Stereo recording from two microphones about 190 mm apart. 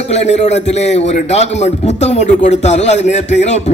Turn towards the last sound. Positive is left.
turn(degrees=35)  # may be behind; listen again after turning